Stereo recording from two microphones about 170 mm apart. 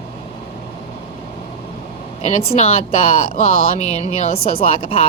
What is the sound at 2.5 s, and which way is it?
Speech, 35° left (ahead or behind).